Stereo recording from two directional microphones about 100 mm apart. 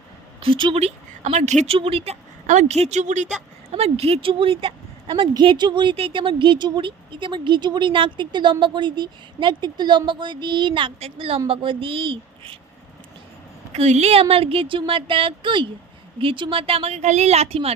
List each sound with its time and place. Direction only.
0.3 s speech: 60° right (ahead or behind)
2.6 s speech: 90° right; by 12.5 s 60° right (ahead or behind)
13.7 s speech: 85° right